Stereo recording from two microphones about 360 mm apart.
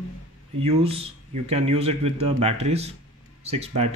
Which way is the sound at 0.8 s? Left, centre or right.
Centre.